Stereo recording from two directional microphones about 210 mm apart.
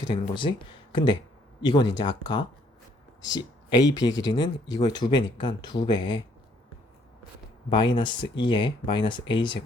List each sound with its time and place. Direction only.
0.1 s speech: 25° left (ahead or behind)
7.7 s speech: 25° left (ahead or behind)